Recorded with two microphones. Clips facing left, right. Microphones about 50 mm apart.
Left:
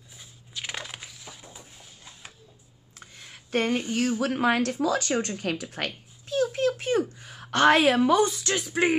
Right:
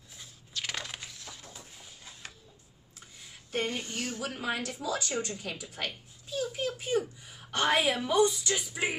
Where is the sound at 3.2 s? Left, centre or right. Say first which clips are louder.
Left 6 dB; left.